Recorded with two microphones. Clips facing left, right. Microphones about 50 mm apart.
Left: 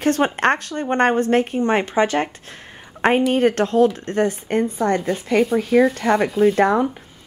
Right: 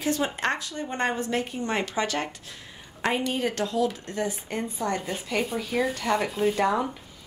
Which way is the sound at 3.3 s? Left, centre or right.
Left.